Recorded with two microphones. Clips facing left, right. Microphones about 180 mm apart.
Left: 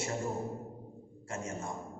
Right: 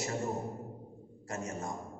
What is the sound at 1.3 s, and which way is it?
Speech, 30° left (ahead or behind).